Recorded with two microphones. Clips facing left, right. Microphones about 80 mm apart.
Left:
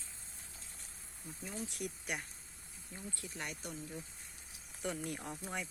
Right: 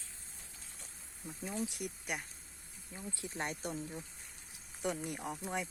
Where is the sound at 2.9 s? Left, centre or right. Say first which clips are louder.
Right 4 dB; centre.